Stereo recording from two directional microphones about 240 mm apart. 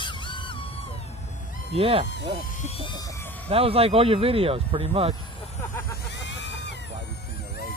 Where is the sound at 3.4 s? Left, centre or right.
Right.